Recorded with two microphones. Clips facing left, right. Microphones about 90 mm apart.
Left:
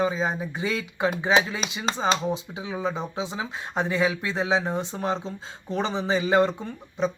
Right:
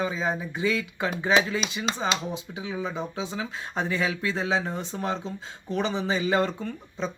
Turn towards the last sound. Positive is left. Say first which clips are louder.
# left 4 dB
turn(degrees=20)  # may be behind; listen again after turning